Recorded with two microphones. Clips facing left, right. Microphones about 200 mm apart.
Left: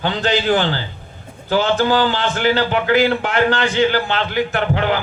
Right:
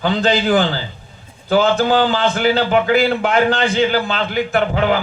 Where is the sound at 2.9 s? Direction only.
40° left (ahead or behind).